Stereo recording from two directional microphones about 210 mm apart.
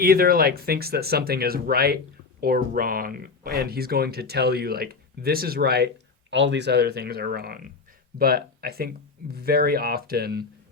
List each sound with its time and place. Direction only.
0.0 s speech: 45° right (ahead or behind)
6.3 s speech: 60° right (ahead or behind)